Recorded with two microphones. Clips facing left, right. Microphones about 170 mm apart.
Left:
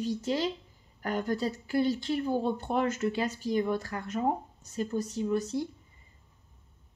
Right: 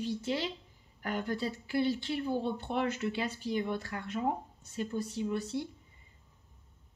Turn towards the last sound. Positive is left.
turn(degrees=40)  # may be behind; listen again after turning